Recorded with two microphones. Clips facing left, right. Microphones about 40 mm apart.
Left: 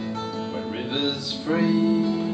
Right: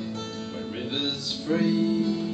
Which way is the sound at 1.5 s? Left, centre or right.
Centre.